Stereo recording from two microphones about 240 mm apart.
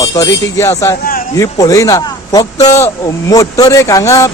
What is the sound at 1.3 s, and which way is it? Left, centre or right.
Speech, centre.